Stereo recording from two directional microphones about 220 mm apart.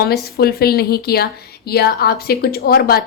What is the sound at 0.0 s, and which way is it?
A woman's voice, 45° left (ahead or behind).